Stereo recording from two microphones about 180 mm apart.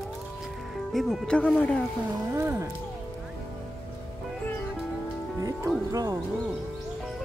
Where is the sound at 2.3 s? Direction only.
15° right (ahead or behind).